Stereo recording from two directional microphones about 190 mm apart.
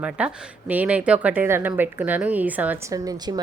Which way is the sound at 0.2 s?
10° right (ahead or behind).